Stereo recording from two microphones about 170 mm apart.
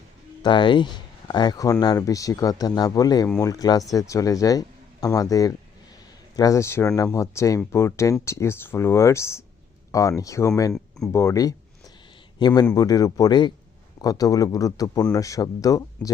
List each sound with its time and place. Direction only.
0.4 s a man's voice: 30° left (ahead or behind)
10.7 s speech: centre (ahead or behind)
11.1 s a man's voice: 15° left (ahead or behind)